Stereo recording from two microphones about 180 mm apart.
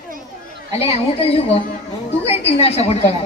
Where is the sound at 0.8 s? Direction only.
35° left (ahead or behind).